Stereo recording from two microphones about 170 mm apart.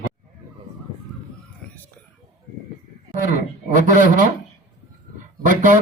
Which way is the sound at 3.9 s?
50° right (ahead or behind).